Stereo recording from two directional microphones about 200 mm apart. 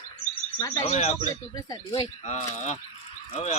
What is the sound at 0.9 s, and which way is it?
Speech, 35° left (ahead or behind).